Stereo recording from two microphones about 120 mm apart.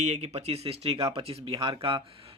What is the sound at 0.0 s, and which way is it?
Speech, 70° right (ahead or behind).